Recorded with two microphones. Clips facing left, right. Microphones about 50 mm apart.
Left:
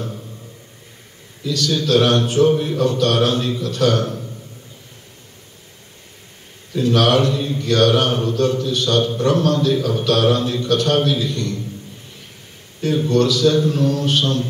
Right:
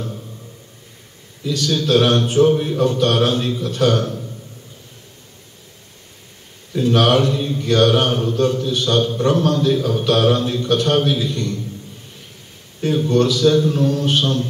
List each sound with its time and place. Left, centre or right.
1.4 s speech: right
6.7 s speech: right
13.1 s speech: right